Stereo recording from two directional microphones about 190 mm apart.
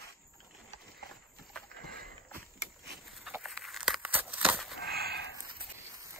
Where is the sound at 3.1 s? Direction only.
5° right (ahead or behind).